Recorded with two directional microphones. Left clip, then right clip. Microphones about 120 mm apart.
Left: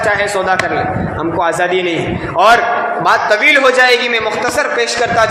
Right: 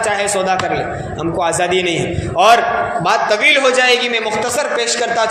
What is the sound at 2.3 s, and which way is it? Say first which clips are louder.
A man's voice: left 1 dB; 30° right (ahead or behind).